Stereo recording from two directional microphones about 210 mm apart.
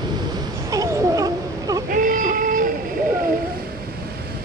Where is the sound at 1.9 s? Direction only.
40° right (ahead or behind).